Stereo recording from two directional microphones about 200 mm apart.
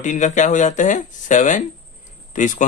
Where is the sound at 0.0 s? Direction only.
35° left (ahead or behind).